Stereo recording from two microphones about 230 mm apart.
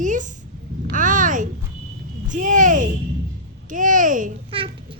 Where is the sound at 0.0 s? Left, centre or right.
Right.